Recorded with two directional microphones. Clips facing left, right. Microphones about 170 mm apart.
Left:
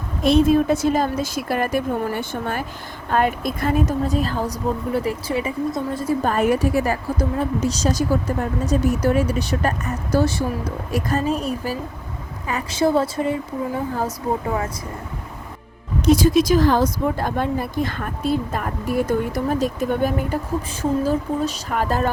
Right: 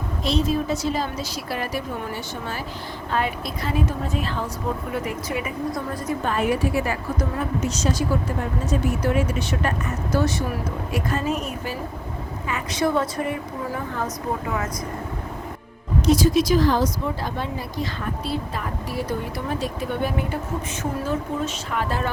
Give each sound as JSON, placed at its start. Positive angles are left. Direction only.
{"t": 0.2, "sound": "a woman's voice", "side_deg": 55}
{"t": 6.2, "sound": "a woman's voice", "side_deg": 45}
{"t": 16.0, "sound": "a woman's voice", "side_deg": 55}